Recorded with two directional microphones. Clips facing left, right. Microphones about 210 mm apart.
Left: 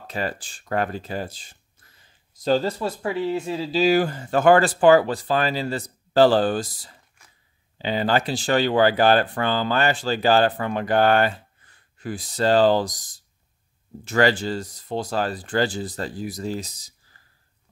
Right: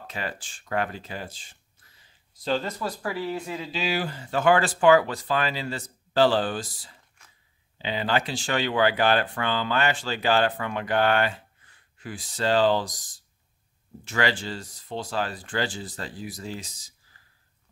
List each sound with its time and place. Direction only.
0.0 s speech: 40° left (ahead or behind)
2.8 s speech: 25° left (ahead or behind); by 12.9 s 40° left (ahead or behind)
14.0 s speech: 40° left (ahead or behind)